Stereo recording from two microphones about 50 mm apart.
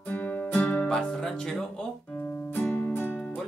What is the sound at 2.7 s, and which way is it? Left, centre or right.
Music, left.